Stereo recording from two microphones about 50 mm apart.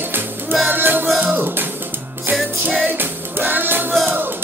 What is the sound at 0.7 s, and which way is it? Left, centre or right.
Music, right.